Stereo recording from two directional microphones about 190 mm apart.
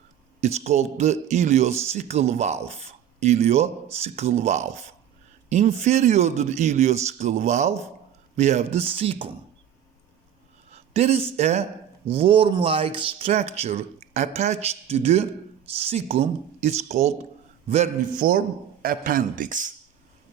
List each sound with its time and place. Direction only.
0.4 s a man's voice: 35° right (ahead or behind)
10.7 s a man's voice: 35° right (ahead or behind)
18.2 s speech: 50° right (ahead or behind)